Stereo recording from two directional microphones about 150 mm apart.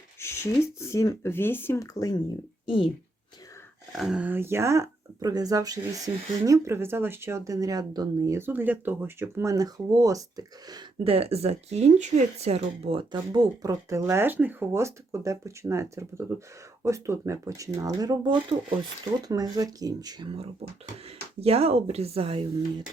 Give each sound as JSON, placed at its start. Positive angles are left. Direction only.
{"t": 0.2, "sound": "speech", "side_deg": 15}
{"t": 3.9, "sound": "speech", "side_deg": -5}
{"t": 11.0, "sound": "speech", "side_deg": -40}
{"t": 21.4, "sound": "speech", "side_deg": -40}